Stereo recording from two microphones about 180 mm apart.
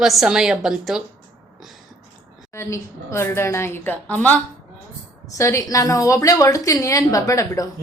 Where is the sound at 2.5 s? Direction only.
15° left (ahead or behind).